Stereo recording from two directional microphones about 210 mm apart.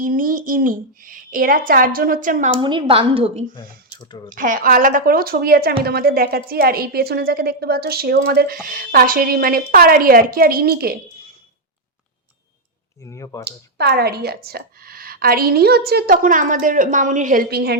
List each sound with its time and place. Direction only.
0.0 s a woman's voice: 40° right (ahead or behind)
2.6 s a woman's voice: 25° right (ahead or behind)
3.5 s speech: 20° left (ahead or behind)
4.3 s speech: 40° right (ahead or behind)
13.1 s speech: 15° left (ahead or behind)
13.4 s speech: 50° right (ahead or behind)